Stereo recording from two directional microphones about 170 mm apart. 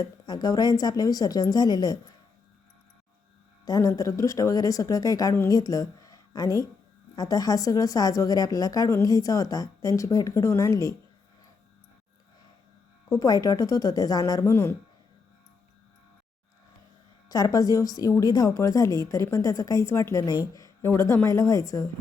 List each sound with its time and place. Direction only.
0.0 s a woman's voice: 25° left (ahead or behind)
3.7 s a woman's voice: 20° left (ahead or behind)
13.1 s a woman's voice: 20° left (ahead or behind)
17.2 s a woman's voice: 20° left (ahead or behind)